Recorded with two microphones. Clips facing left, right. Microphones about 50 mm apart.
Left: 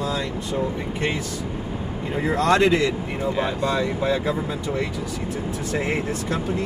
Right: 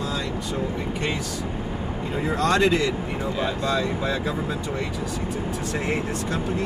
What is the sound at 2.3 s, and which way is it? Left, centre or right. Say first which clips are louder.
Speech: left 2 dB; left.